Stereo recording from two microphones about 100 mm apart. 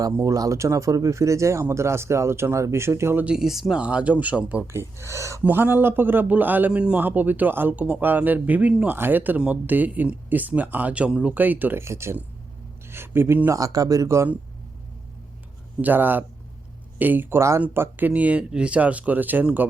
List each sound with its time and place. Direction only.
0.0 s speech: 35° right (ahead or behind)
3.2 s a man's voice: 5° right (ahead or behind)
4.6 s speech: 25° right (ahead or behind)
5.4 s a man's voice: 20° right (ahead or behind)
13.6 s speech: 35° right (ahead or behind)
15.8 s a man's voice: 20° right (ahead or behind)